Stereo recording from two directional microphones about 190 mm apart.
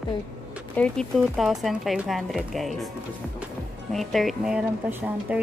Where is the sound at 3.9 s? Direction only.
Centre (ahead or behind).